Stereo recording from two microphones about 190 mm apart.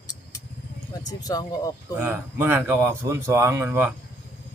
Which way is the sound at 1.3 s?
20° left (ahead or behind).